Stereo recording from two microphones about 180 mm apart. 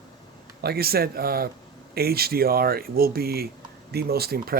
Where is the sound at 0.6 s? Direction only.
60° right (ahead or behind).